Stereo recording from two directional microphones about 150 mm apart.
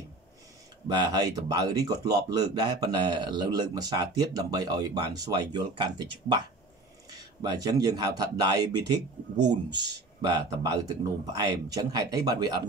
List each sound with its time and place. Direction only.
0.9 s speech: 25° right (ahead or behind)